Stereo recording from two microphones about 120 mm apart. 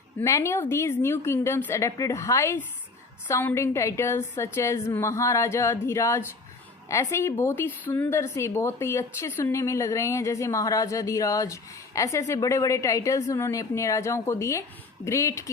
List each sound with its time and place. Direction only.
0.2 s a woman's voice: 25° left (ahead or behind)